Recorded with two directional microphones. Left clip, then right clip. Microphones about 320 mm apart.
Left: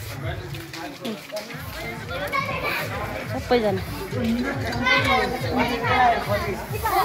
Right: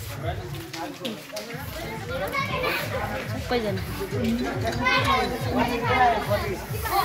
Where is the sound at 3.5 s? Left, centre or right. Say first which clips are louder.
Left 6 dB; centre.